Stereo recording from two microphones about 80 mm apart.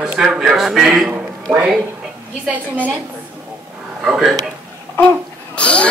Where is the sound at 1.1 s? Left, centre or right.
Centre.